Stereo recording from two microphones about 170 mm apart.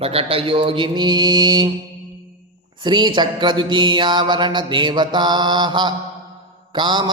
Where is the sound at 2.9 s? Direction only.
25° right (ahead or behind).